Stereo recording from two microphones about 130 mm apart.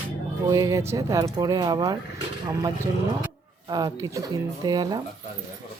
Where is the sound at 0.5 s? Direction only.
25° right (ahead or behind).